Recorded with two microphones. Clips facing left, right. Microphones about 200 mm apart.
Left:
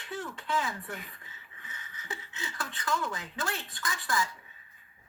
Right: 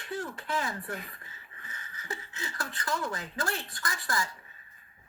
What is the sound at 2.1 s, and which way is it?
Speech, 40° right (ahead or behind).